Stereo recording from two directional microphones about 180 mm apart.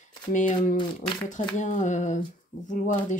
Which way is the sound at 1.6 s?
45° left (ahead or behind).